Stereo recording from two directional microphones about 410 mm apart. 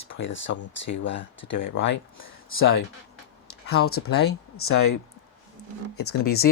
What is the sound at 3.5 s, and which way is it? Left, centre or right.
Speech, left.